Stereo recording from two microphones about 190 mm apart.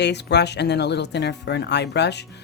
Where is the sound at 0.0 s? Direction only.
65° left (ahead or behind).